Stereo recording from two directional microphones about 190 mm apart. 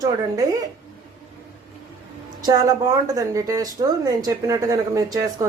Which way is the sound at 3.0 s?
20° right (ahead or behind).